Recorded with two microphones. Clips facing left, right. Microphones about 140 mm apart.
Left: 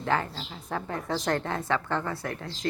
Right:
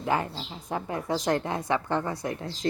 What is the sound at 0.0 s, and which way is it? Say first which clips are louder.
A woman's voice: right 1 dB; 15° right (ahead or behind).